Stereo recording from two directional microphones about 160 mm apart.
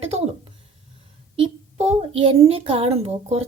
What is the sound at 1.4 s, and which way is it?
A child's voice, 40° right (ahead or behind).